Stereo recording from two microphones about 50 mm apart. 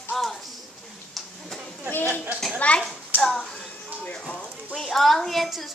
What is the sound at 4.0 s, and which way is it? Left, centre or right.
Music, left.